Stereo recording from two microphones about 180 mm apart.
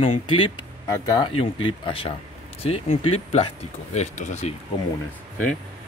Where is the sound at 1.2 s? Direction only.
30° left (ahead or behind).